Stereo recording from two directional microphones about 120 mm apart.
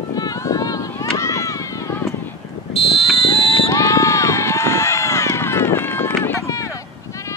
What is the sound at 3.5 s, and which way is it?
Run, 25° left (ahead or behind).